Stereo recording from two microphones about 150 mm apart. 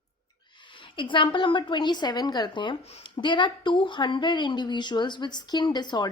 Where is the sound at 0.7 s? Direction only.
35° left (ahead or behind).